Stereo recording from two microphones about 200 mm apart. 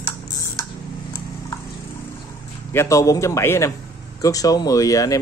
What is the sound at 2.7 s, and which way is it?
Speech, 15° left (ahead or behind).